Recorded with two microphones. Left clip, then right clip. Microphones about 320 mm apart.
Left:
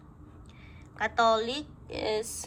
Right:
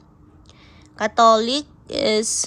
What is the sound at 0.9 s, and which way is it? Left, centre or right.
A woman's voice, centre.